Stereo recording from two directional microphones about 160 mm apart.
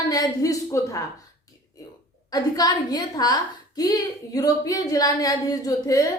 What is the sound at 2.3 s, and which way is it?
A woman's voice, 25° left (ahead or behind).